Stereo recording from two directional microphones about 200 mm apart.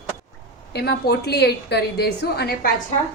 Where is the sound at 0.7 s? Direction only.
55° left (ahead or behind).